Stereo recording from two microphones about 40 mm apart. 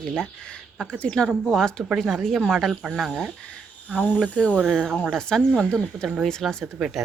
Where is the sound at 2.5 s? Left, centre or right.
Centre.